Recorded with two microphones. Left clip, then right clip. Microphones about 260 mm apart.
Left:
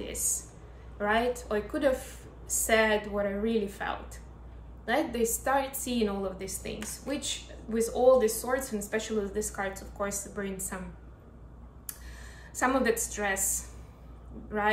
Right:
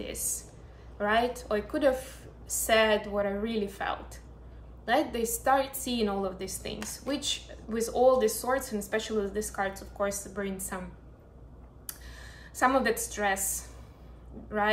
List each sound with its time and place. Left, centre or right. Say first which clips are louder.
0.0 s a sound: left 2 dB; centre
0.9 s a woman's voice: right 1 dB; centre
11.9 s a woman's voice: right 1 dB; centre